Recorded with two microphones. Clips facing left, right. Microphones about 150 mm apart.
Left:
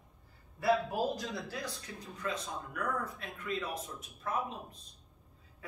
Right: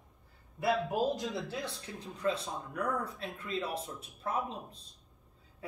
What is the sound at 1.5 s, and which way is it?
Speech, 25° right (ahead or behind).